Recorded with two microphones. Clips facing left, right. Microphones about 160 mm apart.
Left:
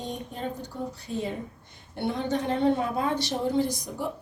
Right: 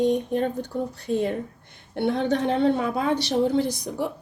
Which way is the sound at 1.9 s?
70° right (ahead or behind).